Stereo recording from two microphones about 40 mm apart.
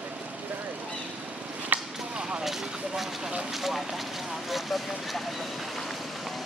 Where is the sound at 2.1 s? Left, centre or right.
Right.